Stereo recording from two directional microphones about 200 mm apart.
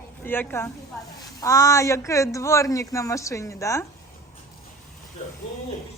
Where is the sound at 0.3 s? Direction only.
10° left (ahead or behind).